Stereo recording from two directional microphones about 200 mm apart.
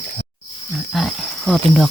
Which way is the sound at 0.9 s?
Centre (ahead or behind).